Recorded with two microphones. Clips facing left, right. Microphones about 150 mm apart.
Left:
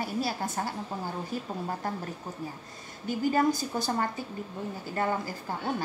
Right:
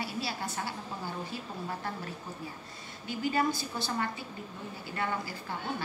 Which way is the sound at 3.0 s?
45° left (ahead or behind).